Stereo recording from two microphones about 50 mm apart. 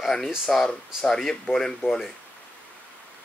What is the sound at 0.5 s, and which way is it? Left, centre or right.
Speech, centre.